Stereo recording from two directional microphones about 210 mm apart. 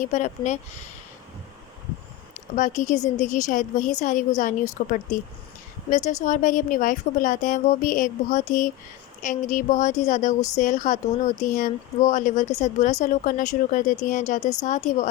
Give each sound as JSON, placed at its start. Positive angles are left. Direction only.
{"t": 0.0, "sound": "a woman's voice", "side_deg": 35}
{"t": 2.6, "sound": "a woman's voice", "side_deg": 35}
{"t": 6.1, "sound": "a woman's voice", "side_deg": 35}